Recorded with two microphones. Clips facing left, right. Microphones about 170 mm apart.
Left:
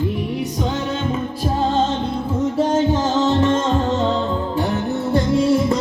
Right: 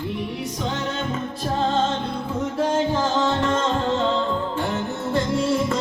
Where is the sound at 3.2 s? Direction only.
20° left (ahead or behind).